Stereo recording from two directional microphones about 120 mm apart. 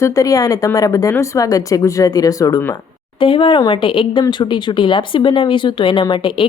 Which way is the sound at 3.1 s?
45° left (ahead or behind).